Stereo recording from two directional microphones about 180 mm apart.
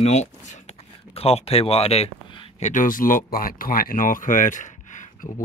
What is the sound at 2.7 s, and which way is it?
Speech, 50° left (ahead or behind).